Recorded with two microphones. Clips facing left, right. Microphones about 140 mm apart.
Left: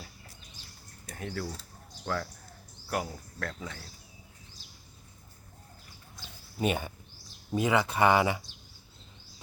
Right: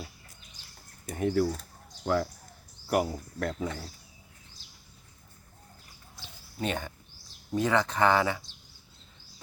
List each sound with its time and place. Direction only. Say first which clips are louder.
1.0 s speech: right 10 dB; 20° right (ahead or behind)
6.6 s speech: left 3 dB; 10° left (ahead or behind)